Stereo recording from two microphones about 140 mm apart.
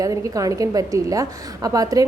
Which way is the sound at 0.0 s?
25° right (ahead or behind).